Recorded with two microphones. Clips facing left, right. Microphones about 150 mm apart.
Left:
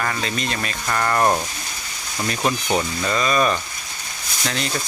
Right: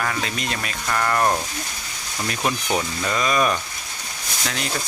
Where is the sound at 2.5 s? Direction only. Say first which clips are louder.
Left 2 dB; 5° left (ahead or behind).